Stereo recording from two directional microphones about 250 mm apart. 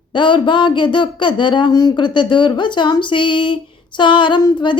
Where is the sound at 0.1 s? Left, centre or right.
Centre.